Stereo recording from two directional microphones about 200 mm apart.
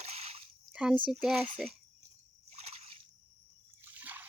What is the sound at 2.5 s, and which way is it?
Splash, 30° right (ahead or behind).